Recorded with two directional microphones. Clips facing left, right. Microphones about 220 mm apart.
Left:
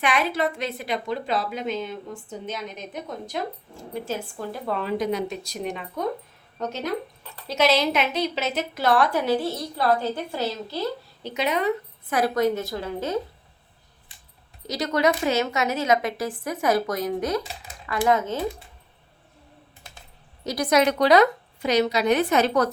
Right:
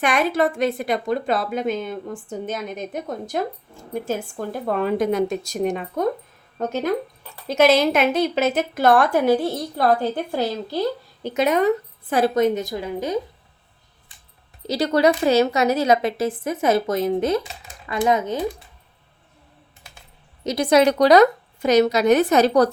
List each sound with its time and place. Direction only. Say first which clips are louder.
0.0 s a woman's voice: right 4 dB; 45° right (ahead or behind)
11.2 s a woman's voice: right 6 dB; 50° right (ahead or behind)
12.0 s a woman's voice: right 4 dB; 30° right (ahead or behind)
14.7 s a woman's voice: right 5 dB; 30° right (ahead or behind)
20.4 s a woman's voice: right 4 dB; 25° right (ahead or behind)